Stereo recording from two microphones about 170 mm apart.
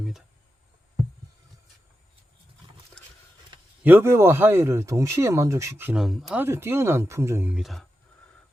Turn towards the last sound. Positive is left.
turn(degrees=0)  # may be behind; listen again after turning